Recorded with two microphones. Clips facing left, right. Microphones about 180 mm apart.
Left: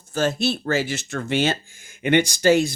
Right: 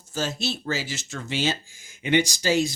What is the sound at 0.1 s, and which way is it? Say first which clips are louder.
Speech: left 7 dB; 55° left (ahead or behind).